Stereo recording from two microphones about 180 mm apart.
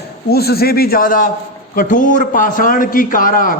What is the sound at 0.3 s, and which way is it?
A man's voice, 60° left (ahead or behind).